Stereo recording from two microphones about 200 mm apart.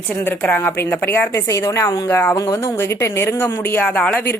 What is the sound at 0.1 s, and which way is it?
A woman's voice, 10° left (ahead or behind).